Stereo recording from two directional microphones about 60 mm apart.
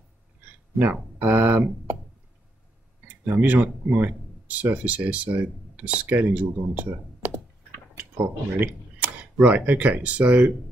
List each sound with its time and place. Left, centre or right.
0.8 s speech: right
3.3 s speech: right
8.5 s speech: right